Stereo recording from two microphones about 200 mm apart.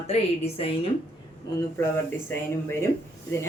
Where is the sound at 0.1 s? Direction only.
30° left (ahead or behind).